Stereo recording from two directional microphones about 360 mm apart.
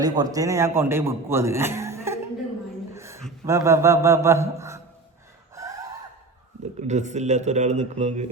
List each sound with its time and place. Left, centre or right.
0.0 s a man's voice: centre
2.9 s a sound: centre
6.7 s a man's voice: centre